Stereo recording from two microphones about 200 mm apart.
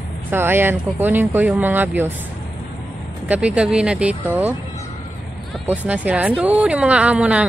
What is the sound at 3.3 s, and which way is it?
Speech, 5° right (ahead or behind).